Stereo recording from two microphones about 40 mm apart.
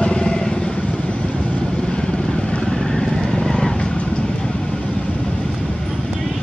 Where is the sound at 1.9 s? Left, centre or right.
Centre.